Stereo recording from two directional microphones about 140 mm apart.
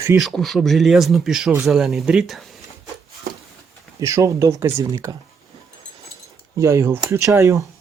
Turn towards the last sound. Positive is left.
turn(degrees=-20)  # may be behind; listen again after turning